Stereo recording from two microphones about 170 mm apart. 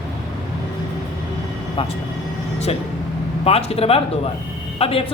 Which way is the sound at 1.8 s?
35° left (ahead or behind).